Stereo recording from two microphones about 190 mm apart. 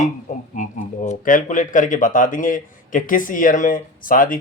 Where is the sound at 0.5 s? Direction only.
40° left (ahead or behind).